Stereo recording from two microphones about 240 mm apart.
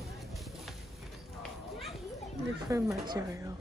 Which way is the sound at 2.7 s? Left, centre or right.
Centre.